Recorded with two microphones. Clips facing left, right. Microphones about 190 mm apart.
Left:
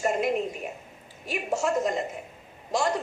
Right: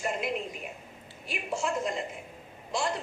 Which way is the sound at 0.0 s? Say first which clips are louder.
Left 6 dB; 45° left (ahead or behind).